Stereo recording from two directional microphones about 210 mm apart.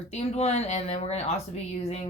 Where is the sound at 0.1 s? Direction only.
30° left (ahead or behind).